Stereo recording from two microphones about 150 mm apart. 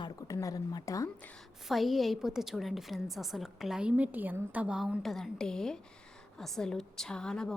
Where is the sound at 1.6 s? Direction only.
Centre (ahead or behind).